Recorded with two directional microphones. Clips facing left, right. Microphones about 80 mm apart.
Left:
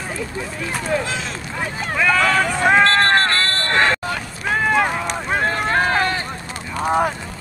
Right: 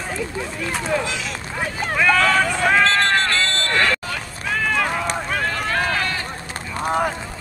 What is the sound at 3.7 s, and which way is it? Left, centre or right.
Vehicle, left.